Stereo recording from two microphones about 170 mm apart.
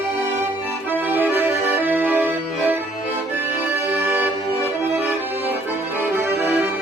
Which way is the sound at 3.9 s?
15° right (ahead or behind).